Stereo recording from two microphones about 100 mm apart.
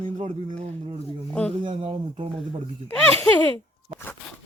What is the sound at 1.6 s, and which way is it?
Speech, 70° right (ahead or behind).